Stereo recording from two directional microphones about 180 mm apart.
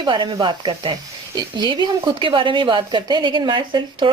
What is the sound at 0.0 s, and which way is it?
Speech, 25° right (ahead or behind).